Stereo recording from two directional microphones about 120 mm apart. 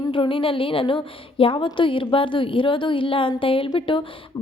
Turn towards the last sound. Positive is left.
turn(degrees=45)  # may be behind; listen again after turning